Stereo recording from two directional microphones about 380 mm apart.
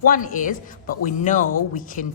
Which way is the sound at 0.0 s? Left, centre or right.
Left.